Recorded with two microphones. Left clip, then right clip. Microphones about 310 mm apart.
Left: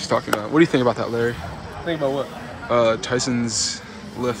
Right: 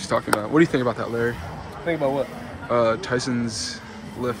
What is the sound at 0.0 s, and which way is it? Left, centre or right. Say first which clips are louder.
Speech: left 1 dB; centre.